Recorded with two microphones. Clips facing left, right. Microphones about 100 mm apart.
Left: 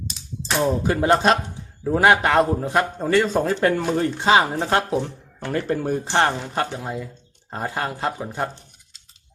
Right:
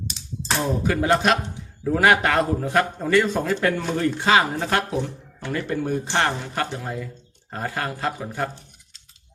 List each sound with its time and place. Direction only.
0.6 s a man's voice: 30° left (ahead or behind)
5.4 s a man's voice: 40° left (ahead or behind); by 8.4 s 25° left (ahead or behind)